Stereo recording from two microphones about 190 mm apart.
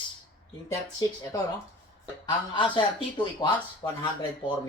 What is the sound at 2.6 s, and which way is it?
Speech, 25° left (ahead or behind).